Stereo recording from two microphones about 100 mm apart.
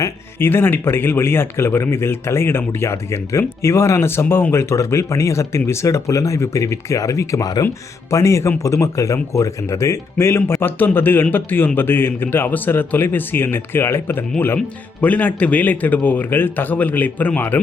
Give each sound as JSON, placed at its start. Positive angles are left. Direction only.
{"t": 0.0, "sound": "speech", "side_deg": 25}